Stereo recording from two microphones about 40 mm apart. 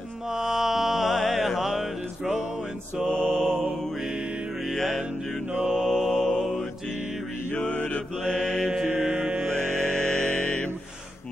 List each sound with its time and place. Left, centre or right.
0.3 s mantra: centre
3.1 s mantra: centre
4.6 s music: centre
5.6 s mantra: centre
7.5 s mantra: left
8.3 s mantra: centre
9.0 s mantra: right
9.5 s mantra: centre
10.2 s mantra: left